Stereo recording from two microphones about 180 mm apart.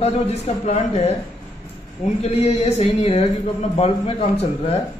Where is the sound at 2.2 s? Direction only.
35° left (ahead or behind).